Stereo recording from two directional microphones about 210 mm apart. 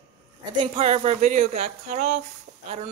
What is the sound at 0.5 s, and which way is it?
Speech, 25° right (ahead or behind).